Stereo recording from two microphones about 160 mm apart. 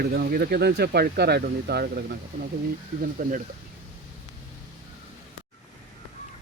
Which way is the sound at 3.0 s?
55° right (ahead or behind).